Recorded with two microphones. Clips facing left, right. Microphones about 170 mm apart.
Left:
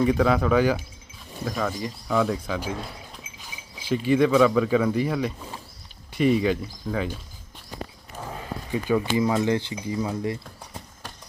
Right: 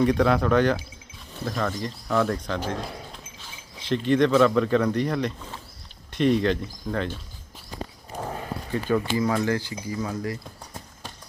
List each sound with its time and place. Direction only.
0.0 s speech: 5° left (ahead or behind)
8.7 s speech: 15° left (ahead or behind)